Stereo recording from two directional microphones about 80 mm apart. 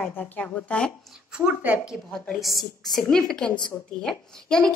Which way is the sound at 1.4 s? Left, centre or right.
Centre.